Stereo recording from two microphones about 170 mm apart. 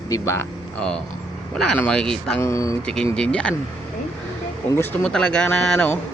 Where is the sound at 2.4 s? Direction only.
20° left (ahead or behind).